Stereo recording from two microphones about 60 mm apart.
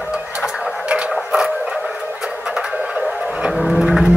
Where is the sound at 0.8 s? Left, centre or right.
Centre.